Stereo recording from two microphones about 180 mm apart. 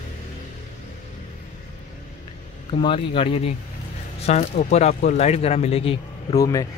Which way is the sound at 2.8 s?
30° left (ahead or behind).